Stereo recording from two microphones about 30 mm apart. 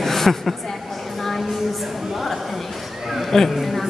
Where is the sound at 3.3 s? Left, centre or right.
Centre.